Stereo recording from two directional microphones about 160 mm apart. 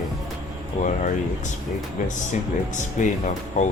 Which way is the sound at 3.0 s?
50° left (ahead or behind).